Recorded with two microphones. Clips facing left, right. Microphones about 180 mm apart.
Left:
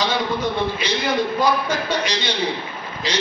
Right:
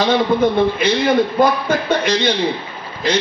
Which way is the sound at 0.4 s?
55° right (ahead or behind).